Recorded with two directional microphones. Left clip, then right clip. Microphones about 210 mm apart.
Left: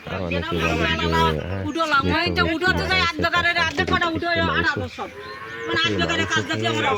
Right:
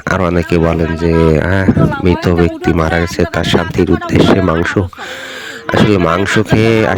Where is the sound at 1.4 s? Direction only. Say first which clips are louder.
Right 11 dB; 50° right (ahead or behind).